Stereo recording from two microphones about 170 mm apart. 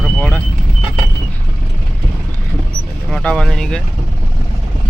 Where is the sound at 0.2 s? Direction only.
10° left (ahead or behind).